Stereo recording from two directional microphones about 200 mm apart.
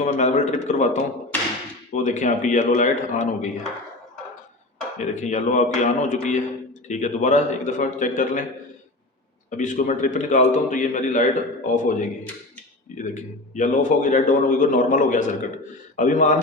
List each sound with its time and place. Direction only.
0.0 s speech: 35° left (ahead or behind)
4.9 s speech: 40° left (ahead or behind)
9.5 s speech: 40° left (ahead or behind)
13.1 s speech: 40° left (ahead or behind)